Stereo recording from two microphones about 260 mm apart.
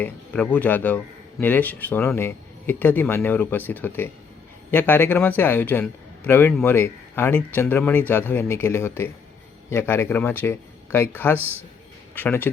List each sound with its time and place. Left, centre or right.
0.0 s speech: centre